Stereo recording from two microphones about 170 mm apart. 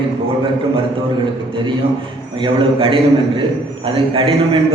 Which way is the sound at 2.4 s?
30° right (ahead or behind).